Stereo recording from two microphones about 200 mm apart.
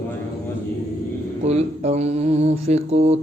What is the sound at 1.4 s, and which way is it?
Speech, 30° right (ahead or behind).